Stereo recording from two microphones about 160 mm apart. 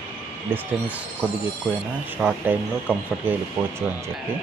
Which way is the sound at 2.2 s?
10° right (ahead or behind).